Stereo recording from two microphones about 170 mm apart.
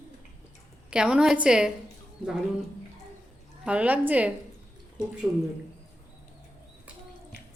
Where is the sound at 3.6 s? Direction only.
5° right (ahead or behind).